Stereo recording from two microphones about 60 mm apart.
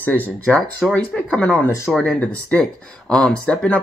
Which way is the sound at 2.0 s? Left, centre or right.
Left.